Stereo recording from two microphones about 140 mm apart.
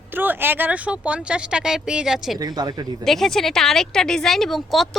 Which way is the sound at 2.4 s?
25° right (ahead or behind).